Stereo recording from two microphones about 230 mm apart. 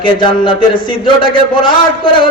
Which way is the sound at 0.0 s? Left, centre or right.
Left.